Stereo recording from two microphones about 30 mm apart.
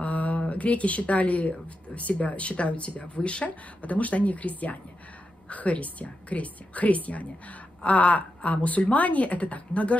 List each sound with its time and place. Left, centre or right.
0.0 s a sound: left
0.5 s speech: left
3.4 s a woman's voice: left